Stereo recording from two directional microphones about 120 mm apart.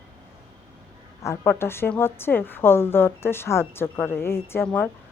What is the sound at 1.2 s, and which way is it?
A woman's voice, 20° left (ahead or behind).